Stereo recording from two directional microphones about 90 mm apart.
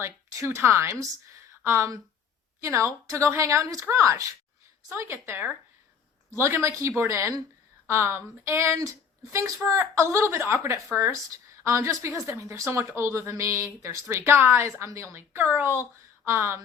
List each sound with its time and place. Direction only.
0.0 s a woman's voice: 30° right (ahead or behind)